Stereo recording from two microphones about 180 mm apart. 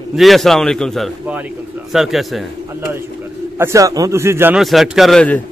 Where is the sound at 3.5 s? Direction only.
15° right (ahead or behind).